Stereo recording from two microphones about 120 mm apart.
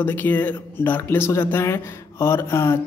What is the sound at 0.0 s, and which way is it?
Speech, 15° left (ahead or behind).